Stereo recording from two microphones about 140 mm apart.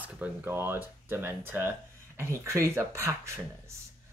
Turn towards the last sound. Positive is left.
turn(degrees=-20)  # may be behind; listen again after turning